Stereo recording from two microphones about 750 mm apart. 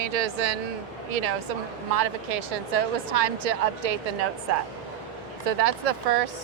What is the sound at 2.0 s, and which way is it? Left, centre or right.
Speech, right.